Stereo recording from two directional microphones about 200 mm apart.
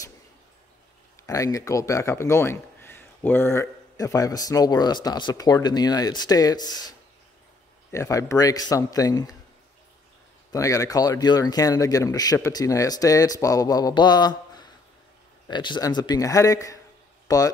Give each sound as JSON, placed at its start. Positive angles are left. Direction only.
{"t": 1.2, "sound": "speech", "side_deg": 15}
{"t": 10.5, "sound": "speech", "side_deg": 15}